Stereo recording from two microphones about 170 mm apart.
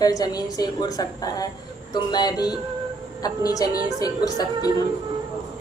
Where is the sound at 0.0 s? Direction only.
20° left (ahead or behind).